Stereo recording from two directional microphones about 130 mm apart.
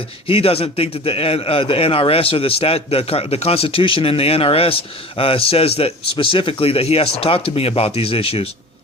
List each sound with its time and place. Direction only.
0.3 s a man's voice: 50° left (ahead or behind)